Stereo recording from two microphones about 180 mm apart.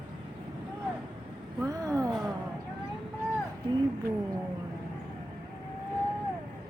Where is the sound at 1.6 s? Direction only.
20° right (ahead or behind).